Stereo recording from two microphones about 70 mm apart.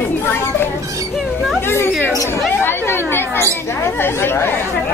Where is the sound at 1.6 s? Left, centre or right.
Left.